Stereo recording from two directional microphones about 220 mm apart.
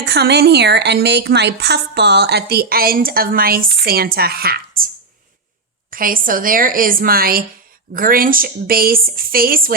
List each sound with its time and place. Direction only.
0.0 s a woman's voice: 50° right (ahead or behind)
5.9 s a woman's voice: 40° right (ahead or behind)